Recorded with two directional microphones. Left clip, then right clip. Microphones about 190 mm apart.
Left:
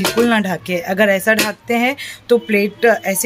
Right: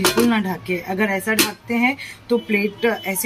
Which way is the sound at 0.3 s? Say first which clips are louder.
Left 5 dB; 55° left (ahead or behind).